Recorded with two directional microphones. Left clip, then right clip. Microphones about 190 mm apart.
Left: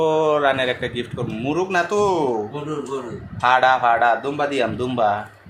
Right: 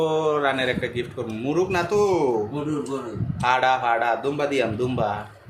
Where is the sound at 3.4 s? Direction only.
5° left (ahead or behind).